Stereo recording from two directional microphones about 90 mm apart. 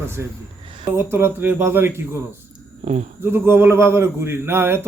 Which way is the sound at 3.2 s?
25° right (ahead or behind).